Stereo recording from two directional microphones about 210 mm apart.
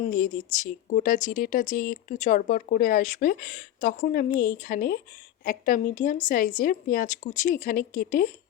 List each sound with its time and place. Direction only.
0.0 s speech: 40° left (ahead or behind)